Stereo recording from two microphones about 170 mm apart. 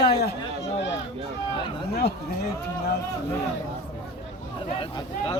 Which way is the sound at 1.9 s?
75° left (ahead or behind).